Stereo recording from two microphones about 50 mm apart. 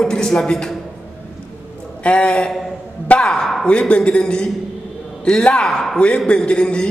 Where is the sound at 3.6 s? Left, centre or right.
Left.